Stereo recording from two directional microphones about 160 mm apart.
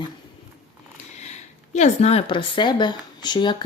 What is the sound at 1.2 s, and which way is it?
Speech, 45° left (ahead or behind).